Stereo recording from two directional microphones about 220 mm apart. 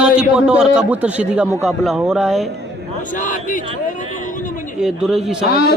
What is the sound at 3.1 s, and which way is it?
Speech, 35° left (ahead or behind).